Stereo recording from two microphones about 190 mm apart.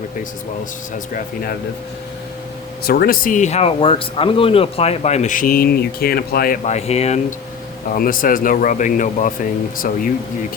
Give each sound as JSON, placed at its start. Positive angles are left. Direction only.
{"t": 1.1, "sound": "speech", "side_deg": 50}
{"t": 2.8, "sound": "speech", "side_deg": 55}
{"t": 6.7, "sound": "speech", "side_deg": 35}
{"t": 7.9, "sound": "speech", "side_deg": 50}